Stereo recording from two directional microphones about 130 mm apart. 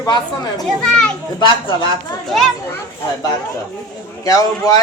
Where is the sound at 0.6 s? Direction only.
5° left (ahead or behind).